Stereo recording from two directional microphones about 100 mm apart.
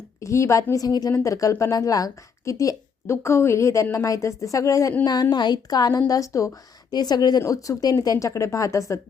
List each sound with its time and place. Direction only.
0.2 s a woman's voice: 30° left (ahead or behind)